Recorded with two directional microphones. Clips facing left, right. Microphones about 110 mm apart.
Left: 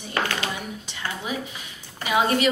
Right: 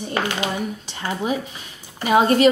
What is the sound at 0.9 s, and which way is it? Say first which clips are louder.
Speech: right 6 dB; 40° right (ahead or behind).